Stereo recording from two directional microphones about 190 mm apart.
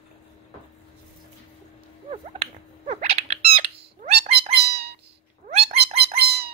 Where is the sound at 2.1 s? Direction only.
30° right (ahead or behind).